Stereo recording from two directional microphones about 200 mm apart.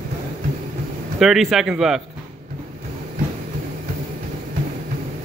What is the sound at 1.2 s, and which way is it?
Speech, centre (ahead or behind).